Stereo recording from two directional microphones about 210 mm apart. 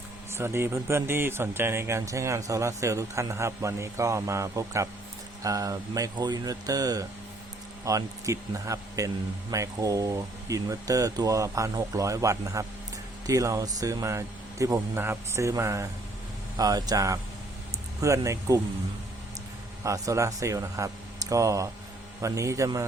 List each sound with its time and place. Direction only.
0.3 s speech: 10° right (ahead or behind)
19.8 s speech: 15° right (ahead or behind)